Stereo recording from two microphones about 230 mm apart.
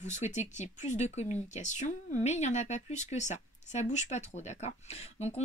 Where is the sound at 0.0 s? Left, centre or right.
Left.